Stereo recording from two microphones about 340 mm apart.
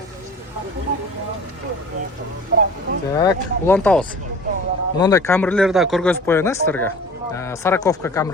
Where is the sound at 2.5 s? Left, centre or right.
Right.